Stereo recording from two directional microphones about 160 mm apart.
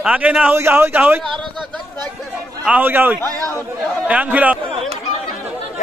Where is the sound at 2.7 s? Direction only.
10° right (ahead or behind).